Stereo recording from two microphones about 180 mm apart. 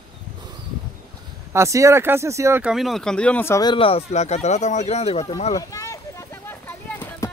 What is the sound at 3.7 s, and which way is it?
Speech, 30° left (ahead or behind).